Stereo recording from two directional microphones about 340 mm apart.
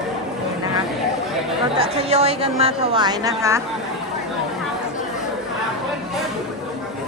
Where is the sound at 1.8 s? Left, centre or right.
Centre.